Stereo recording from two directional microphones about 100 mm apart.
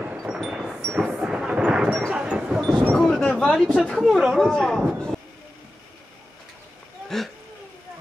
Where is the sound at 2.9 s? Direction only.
5° left (ahead or behind).